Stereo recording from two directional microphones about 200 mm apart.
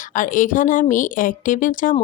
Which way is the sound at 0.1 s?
40° left (ahead or behind).